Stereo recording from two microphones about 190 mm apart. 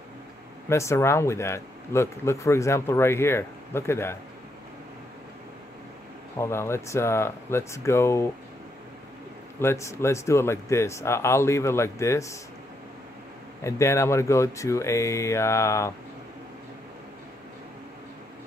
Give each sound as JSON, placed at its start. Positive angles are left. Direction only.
{"t": 0.7, "sound": "speech", "side_deg": 15}
{"t": 6.3, "sound": "speech", "side_deg": 15}
{"t": 9.6, "sound": "speech", "side_deg": 15}
{"t": 13.7, "sound": "speech", "side_deg": 15}